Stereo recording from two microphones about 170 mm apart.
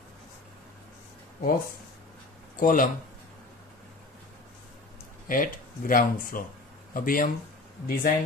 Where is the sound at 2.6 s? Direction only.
50° left (ahead or behind).